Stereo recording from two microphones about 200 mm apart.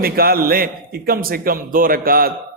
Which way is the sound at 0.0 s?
50° right (ahead or behind).